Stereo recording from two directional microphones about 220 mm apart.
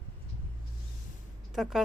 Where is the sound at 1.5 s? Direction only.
Centre (ahead or behind).